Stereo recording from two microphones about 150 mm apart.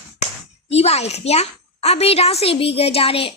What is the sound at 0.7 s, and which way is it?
A woman's voice, 45° left (ahead or behind).